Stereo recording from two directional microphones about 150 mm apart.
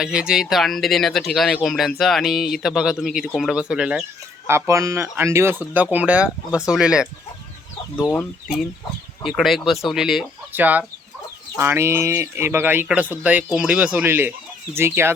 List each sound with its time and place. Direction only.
0.0 s speech: 5° right (ahead or behind)
4.4 s speech: 15° right (ahead or behind)
7.9 s speech: 15° left (ahead or behind)
9.2 s speech: centre (ahead or behind)